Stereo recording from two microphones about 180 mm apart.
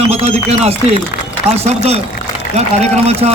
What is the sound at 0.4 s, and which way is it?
A man's voice, 35° right (ahead or behind).